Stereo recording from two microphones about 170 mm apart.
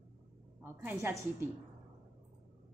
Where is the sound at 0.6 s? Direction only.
15° right (ahead or behind).